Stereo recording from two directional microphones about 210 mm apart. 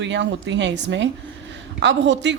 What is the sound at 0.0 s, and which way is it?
Speech, 60° right (ahead or behind).